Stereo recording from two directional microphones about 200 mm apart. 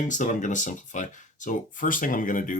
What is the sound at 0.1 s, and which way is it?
Speech, 40° left (ahead or behind).